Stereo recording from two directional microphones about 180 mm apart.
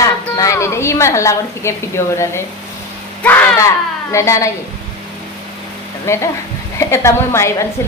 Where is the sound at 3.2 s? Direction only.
10° left (ahead or behind).